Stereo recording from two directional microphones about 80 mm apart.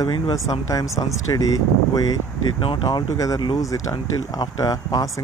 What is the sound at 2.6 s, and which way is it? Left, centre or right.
Speech, left.